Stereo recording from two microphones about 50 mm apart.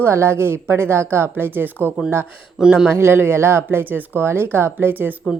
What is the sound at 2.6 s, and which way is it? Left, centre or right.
Speech, centre.